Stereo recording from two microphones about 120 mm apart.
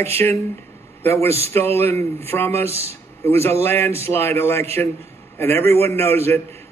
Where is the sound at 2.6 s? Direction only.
55° right (ahead or behind).